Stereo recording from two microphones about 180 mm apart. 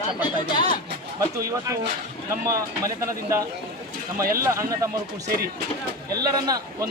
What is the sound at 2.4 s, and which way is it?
Speech, 15° right (ahead or behind).